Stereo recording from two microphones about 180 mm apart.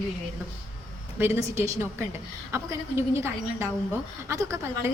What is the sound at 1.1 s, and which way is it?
A woman's voice, 15° right (ahead or behind).